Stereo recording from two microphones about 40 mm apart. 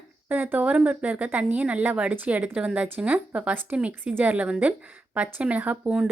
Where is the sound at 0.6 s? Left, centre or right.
Right.